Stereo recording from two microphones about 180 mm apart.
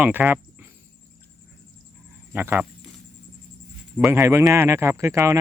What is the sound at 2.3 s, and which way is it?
Speech, 10° right (ahead or behind).